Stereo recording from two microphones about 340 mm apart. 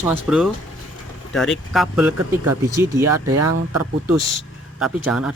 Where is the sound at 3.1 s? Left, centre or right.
Right.